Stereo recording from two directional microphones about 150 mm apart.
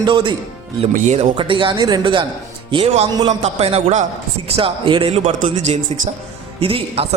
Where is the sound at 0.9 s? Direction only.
55° right (ahead or behind).